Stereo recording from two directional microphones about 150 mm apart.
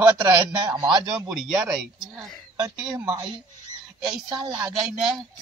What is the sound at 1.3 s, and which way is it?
Speech, 5° right (ahead or behind).